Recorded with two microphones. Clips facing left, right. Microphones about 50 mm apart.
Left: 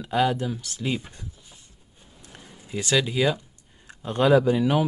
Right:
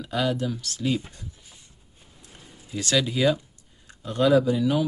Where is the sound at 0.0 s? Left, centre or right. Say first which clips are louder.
Left 3 dB; left.